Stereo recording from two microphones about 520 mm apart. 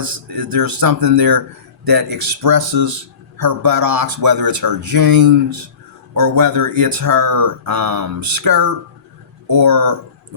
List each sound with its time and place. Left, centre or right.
0.0 s speech: right